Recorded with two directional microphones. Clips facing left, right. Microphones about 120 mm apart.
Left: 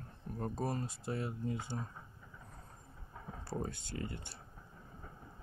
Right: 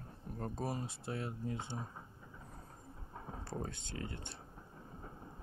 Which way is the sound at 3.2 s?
35° right (ahead or behind).